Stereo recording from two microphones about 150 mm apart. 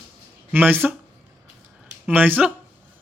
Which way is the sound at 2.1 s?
10° right (ahead or behind).